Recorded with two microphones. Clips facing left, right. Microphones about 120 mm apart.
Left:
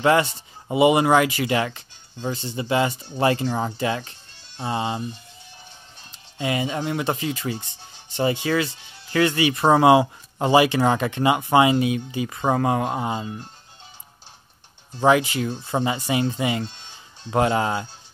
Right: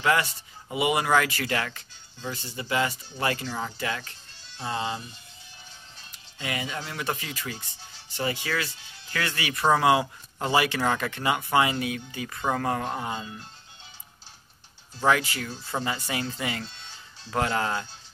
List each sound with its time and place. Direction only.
0.0 s speech: 25° left (ahead or behind)
6.1 s speech: 25° left (ahead or behind)
13.2 s speech: 40° left (ahead or behind)
15.0 s speech: 20° left (ahead or behind)